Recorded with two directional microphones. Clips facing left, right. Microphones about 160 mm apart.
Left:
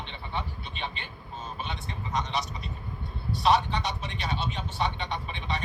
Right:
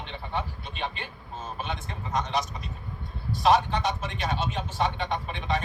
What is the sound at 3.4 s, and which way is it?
Speech, 45° right (ahead or behind).